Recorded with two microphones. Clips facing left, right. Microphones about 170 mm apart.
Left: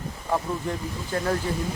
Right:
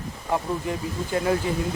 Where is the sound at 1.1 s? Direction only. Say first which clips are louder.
Right 3 dB; 10° right (ahead or behind).